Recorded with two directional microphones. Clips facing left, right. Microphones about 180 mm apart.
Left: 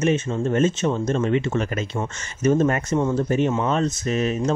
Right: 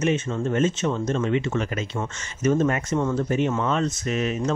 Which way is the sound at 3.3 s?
40° left (ahead or behind).